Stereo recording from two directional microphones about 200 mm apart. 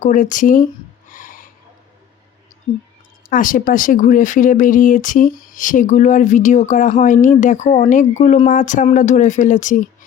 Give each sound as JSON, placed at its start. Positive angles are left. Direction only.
{"t": 0.0, "sound": "speech", "side_deg": 40}
{"t": 1.1, "sound": "a sound", "side_deg": 40}
{"t": 3.2, "sound": "speech", "side_deg": 40}